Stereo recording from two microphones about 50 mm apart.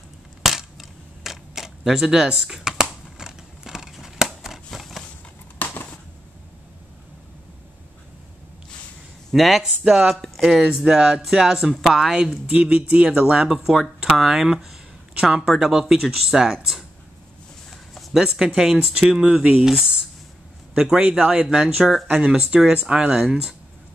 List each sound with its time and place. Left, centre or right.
0.4 s a sound: centre
9.3 s speech: centre
10.1 s speech: centre
10.4 s speech: centre
12.5 s speech: right
13.4 s speech: centre
17.6 s a sound: centre
18.1 s speech: centre
19.0 s a man's voice: centre
22.0 s speech: right
22.3 s speech: centre